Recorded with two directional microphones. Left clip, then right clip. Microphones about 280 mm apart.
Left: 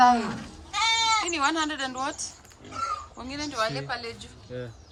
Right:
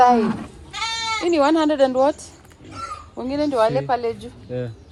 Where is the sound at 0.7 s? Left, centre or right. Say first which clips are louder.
Left 1 dB; left.